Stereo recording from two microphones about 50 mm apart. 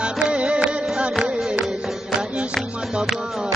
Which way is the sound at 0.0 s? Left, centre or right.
Right.